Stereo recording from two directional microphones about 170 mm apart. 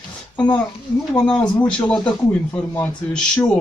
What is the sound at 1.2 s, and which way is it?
Speech, 5° left (ahead or behind).